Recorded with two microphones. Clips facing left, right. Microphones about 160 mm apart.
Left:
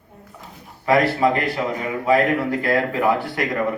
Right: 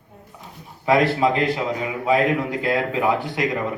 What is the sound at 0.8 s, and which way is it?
Speech, 15° right (ahead or behind).